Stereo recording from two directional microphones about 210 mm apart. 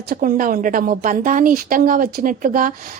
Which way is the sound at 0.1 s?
40° right (ahead or behind).